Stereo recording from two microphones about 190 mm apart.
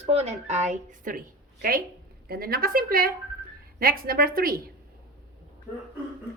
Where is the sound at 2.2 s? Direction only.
50° right (ahead or behind).